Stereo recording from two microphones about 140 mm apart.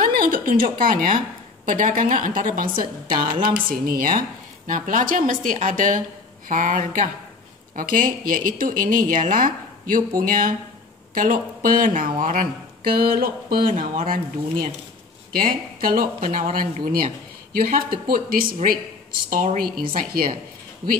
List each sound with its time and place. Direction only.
0.0 s a woman's voice: 90° right
3.1 s speech: 35° right (ahead or behind)
3.5 s speech: 90° right
4.6 s speech: 75° right (ahead or behind)
7.7 s speech: 80° right
13.7 s speech: 70° right (ahead or behind)
16.8 s speech: 90° right
19.3 s a woman's voice: 65° right (ahead or behind)
19.9 s speech: 90° right